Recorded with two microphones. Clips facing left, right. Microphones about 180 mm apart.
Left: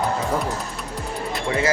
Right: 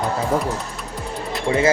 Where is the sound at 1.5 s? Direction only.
25° right (ahead or behind).